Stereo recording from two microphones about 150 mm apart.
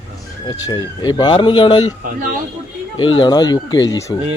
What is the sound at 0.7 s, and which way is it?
Speech, 30° left (ahead or behind).